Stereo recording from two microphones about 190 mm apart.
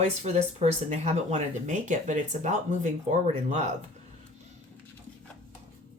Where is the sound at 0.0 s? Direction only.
35° right (ahead or behind).